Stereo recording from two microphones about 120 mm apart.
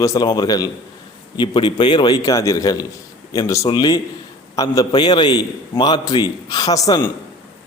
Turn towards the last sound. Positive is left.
turn(degrees=35)  # may be behind; listen again after turning